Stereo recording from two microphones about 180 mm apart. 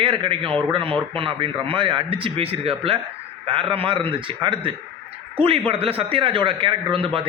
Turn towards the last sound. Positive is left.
turn(degrees=-30)  # may be behind; listen again after turning